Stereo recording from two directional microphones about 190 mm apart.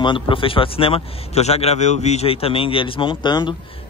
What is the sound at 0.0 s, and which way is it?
A man's voice, 25° left (ahead or behind).